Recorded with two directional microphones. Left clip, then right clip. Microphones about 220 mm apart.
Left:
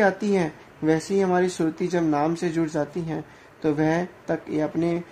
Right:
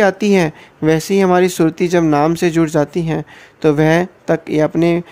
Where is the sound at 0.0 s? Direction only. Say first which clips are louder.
Right 8 dB; 35° right (ahead or behind).